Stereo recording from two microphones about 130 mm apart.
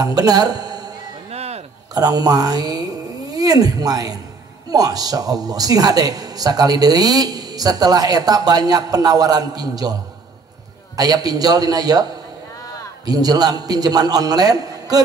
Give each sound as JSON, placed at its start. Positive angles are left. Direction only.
{"t": 0.0, "sound": "speech", "side_deg": -30}
{"t": 1.3, "sound": "a sound", "side_deg": -55}
{"t": 2.0, "sound": "a woman's voice", "side_deg": -30}
{"t": 11.0, "sound": "a woman's voice", "side_deg": -30}